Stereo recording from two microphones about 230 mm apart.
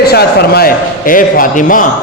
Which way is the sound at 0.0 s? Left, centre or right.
Left.